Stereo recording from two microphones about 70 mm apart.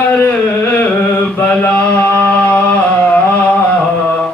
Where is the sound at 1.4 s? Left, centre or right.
Left.